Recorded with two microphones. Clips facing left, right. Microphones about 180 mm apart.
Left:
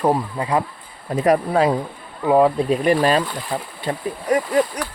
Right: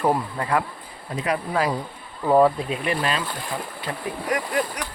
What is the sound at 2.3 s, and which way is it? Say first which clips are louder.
Speech: left 2 dB; 10° left (ahead or behind).